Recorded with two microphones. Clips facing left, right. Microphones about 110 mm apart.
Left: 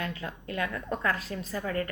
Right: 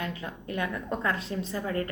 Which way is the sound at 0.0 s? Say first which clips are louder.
Even; 25° right (ahead or behind).